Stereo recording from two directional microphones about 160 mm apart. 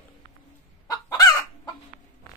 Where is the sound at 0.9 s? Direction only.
20° left (ahead or behind).